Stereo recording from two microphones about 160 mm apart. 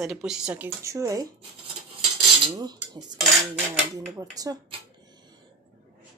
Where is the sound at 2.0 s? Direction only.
25° right (ahead or behind).